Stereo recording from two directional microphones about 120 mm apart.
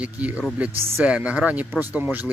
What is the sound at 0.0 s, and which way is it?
Speech, 10° right (ahead or behind).